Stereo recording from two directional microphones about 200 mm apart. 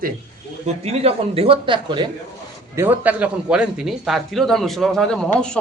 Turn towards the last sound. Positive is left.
turn(degrees=5)  # may be behind; listen again after turning